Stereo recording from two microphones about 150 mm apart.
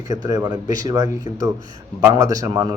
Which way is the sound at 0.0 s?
25° right (ahead or behind).